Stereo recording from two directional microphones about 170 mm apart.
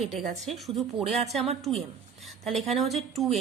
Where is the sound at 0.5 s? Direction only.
Centre (ahead or behind).